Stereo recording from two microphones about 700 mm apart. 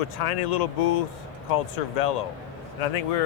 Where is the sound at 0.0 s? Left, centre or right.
Left.